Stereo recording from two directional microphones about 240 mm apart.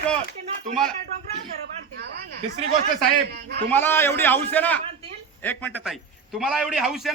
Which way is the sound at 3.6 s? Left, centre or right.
Centre.